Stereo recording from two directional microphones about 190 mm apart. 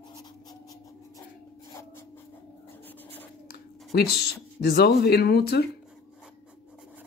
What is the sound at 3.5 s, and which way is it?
Speech, 55° left (ahead or behind).